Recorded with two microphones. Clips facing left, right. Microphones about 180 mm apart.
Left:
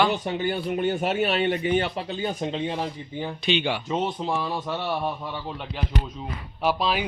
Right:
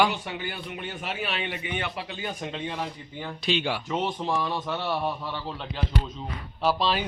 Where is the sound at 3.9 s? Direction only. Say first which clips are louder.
Left 2 dB; 15° left (ahead or behind).